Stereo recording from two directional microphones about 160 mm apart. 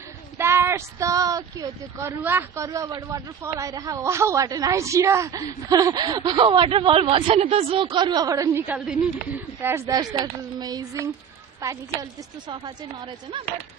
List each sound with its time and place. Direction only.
0.3 s speech: 15° right (ahead or behind)